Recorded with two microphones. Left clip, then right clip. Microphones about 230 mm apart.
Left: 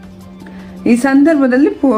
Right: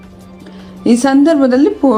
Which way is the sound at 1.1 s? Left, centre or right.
Centre.